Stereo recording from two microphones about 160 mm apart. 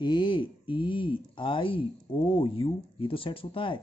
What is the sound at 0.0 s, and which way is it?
Speech, 30° left (ahead or behind).